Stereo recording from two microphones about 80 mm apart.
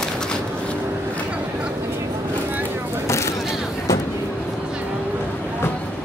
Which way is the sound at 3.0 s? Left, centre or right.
Left.